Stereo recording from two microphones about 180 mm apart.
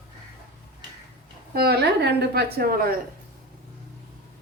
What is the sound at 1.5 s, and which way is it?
Speech, 60° right (ahead or behind).